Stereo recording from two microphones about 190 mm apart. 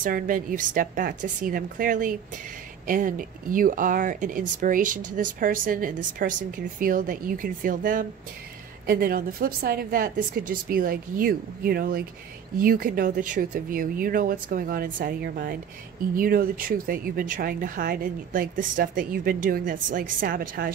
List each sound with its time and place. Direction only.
0.0 s speech: 45° right (ahead or behind)